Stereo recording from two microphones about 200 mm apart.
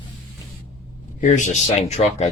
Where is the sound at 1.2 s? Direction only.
40° left (ahead or behind).